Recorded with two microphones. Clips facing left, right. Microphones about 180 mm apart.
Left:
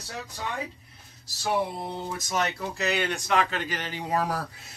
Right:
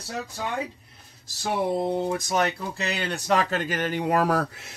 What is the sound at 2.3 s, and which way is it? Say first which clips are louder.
A man's voice: right 3 dB; 35° right (ahead or behind).